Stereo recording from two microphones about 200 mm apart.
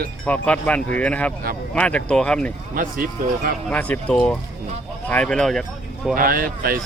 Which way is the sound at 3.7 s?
5° left (ahead or behind).